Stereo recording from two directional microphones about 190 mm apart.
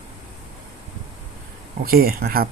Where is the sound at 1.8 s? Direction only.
50° right (ahead or behind).